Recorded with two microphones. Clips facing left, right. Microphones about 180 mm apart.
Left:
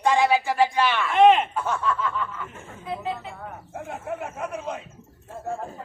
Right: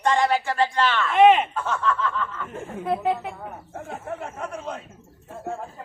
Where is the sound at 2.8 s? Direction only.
60° right (ahead or behind).